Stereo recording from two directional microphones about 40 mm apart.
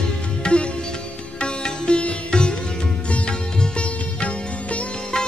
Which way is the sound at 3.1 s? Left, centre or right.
Left.